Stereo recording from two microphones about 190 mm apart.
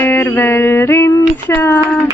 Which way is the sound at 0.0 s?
10° left (ahead or behind).